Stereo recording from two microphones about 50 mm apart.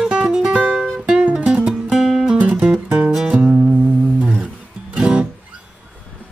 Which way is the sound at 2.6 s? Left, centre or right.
Right.